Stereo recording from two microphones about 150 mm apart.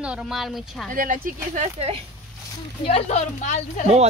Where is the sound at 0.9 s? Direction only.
65° right (ahead or behind); by 2.0 s 50° right (ahead or behind).